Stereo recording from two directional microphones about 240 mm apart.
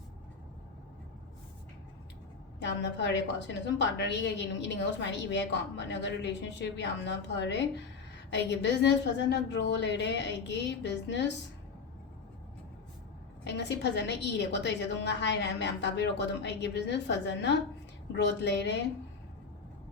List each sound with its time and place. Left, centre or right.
2.6 s a woman's voice: left
13.4 s a woman's voice: left